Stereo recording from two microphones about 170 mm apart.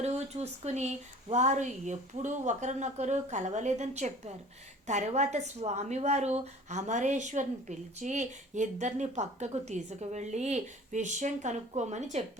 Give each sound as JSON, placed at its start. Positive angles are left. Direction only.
{"t": 0.0, "sound": "a woman's voice", "side_deg": -40}